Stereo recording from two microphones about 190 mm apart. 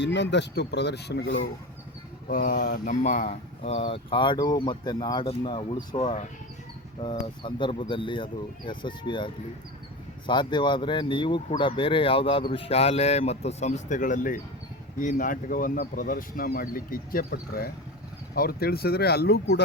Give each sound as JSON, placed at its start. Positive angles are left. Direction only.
{"t": 0.0, "sound": "speech", "side_deg": 65}
{"t": 2.3, "sound": "speech", "side_deg": 50}